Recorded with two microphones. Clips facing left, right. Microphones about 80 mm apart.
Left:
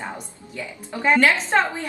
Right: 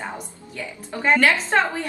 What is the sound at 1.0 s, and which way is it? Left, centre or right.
Speech, centre.